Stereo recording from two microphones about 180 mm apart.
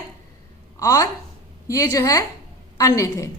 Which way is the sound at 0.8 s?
20° left (ahead or behind).